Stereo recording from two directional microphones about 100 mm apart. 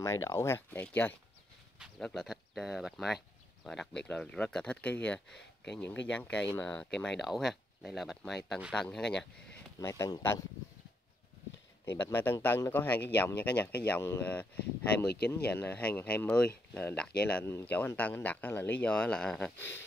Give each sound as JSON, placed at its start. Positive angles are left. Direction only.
{"t": 0.0, "sound": "speech", "side_deg": 30}
{"t": 0.7, "sound": "speech", "side_deg": 15}
{"t": 2.2, "sound": "speech", "side_deg": -5}
{"t": 6.9, "sound": "speech", "side_deg": 5}
{"t": 9.8, "sound": "speech", "side_deg": 30}
{"t": 11.8, "sound": "speech", "side_deg": 20}